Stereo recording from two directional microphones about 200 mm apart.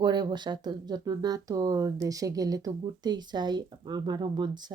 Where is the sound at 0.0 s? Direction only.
20° right (ahead or behind).